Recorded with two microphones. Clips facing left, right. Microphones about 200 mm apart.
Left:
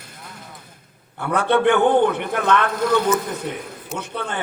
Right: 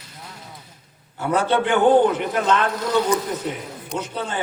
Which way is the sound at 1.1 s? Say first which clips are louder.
Left 1 dB; 60° left (ahead or behind).